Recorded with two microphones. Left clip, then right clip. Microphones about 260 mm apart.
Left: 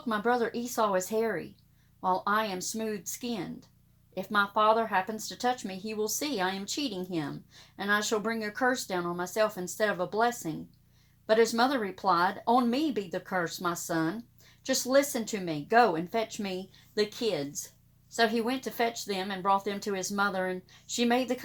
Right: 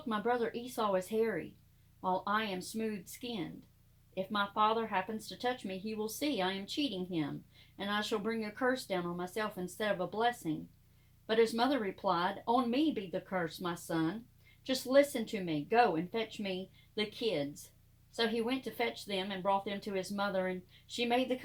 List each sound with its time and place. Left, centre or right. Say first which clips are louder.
0.1 s speech: left 5 dB; left
4.1 s speech: left 7 dB; left